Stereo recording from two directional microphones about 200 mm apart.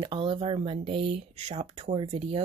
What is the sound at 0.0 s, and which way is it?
Speech, 25° right (ahead or behind).